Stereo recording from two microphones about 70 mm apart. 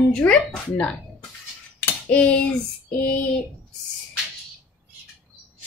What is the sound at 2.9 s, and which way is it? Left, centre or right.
Female singing, left.